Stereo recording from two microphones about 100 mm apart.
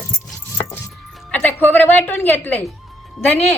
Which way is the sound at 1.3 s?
15° left (ahead or behind).